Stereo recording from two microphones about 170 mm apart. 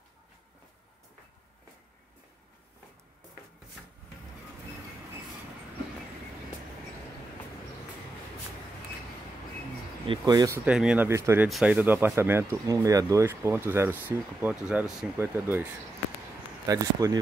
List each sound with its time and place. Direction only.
10.0 s speech: 25° right (ahead or behind)
10.6 s speech: 5° right (ahead or behind)
11.1 s speech: 15° right (ahead or behind)
11.4 s speech: 5° right (ahead or behind); by 17.2 s 20° right (ahead or behind)